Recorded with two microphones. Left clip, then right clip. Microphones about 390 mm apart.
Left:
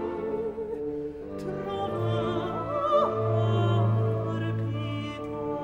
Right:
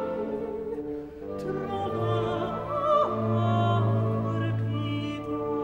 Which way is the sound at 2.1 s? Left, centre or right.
Centre.